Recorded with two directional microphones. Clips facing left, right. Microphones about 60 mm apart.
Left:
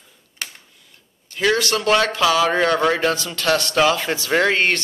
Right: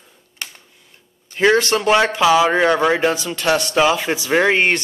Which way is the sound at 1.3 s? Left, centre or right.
Right.